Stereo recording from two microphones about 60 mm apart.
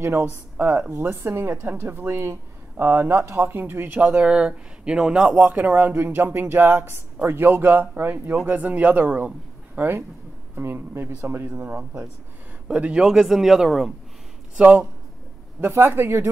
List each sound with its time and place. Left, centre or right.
0.0 s speech: right
0.8 s a woman's voice: right; by 5.4 s centre
5.4 s speech: right
12.6 s speech: centre
14.6 s speech: right
15.9 s speech: right